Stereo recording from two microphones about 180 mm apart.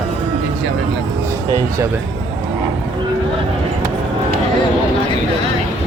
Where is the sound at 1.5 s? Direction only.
15° right (ahead or behind).